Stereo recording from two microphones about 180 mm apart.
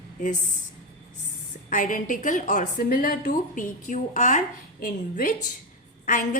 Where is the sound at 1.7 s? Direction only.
45° left (ahead or behind).